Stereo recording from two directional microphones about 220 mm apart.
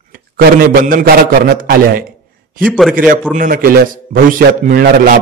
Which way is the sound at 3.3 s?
40° right (ahead or behind).